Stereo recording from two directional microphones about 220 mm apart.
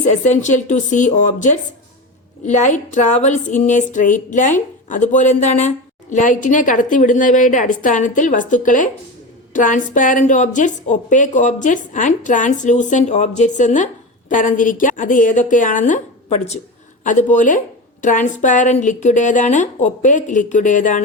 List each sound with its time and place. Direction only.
0.0 s a woman's voice: 35° left (ahead or behind)